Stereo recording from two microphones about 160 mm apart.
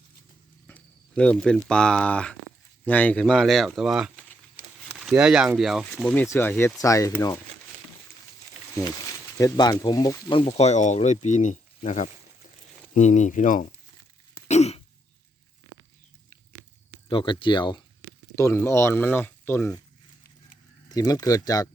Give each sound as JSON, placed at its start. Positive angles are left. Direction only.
{"t": 0.7, "sound": "speech", "side_deg": 5}
{"t": 9.4, "sound": "speech", "side_deg": 25}
{"t": 10.4, "sound": "speech", "side_deg": 40}
{"t": 14.4, "sound": "throat clearing", "side_deg": 45}
{"t": 17.1, "sound": "speech", "side_deg": 30}
{"t": 18.3, "sound": "speech", "side_deg": 15}
{"t": 20.9, "sound": "speech", "side_deg": 25}